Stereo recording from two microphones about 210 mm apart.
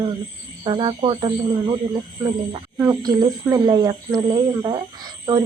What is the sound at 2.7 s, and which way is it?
Speech, 15° right (ahead or behind).